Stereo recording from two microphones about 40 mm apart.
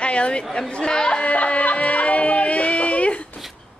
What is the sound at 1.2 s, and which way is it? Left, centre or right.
Music, left.